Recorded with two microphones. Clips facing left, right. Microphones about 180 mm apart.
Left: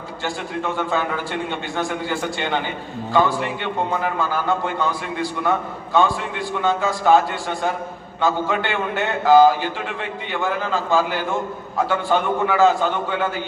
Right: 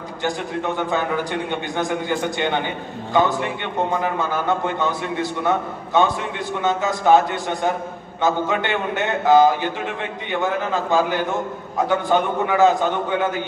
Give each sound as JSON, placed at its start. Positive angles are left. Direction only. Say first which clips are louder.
{"t": 1.8, "sound": "a man's voice", "louder": "right 2 dB", "side_deg": -20}
{"t": 8.2, "sound": "a man's voice", "louder": "right 1 dB", "side_deg": -20}